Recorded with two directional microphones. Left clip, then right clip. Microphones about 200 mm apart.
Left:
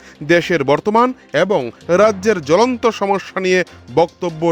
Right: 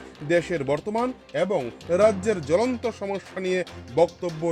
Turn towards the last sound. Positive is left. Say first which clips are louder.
# left 6 dB
turn(degrees=35)  # may be behind; listen again after turning